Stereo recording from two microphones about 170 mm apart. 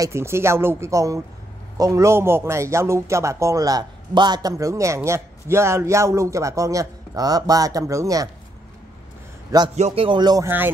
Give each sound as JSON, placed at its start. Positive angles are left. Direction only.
{"t": 0.0, "sound": "a man's voice", "side_deg": -15}
{"t": 9.8, "sound": "speech", "side_deg": -35}